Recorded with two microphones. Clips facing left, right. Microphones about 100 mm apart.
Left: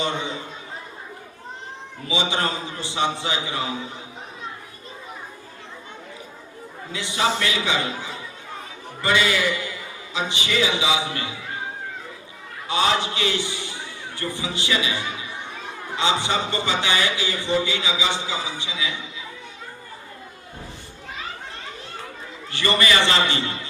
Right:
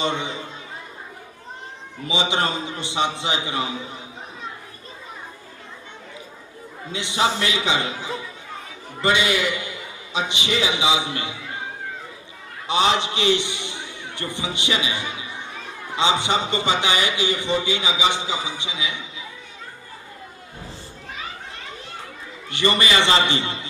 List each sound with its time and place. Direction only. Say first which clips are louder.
0.0 s a man's voice: right 1 dB; 20° right (ahead or behind)
2.0 s a man's voice: right 1 dB; 20° right (ahead or behind)
6.9 s a man's voice: right 1 dB; 20° right (ahead or behind)
12.6 s a man's voice: right 2 dB; 20° right (ahead or behind)
22.4 s a man's voice: right 1 dB; 20° right (ahead or behind)